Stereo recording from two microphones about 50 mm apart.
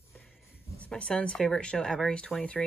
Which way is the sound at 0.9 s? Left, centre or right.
Left.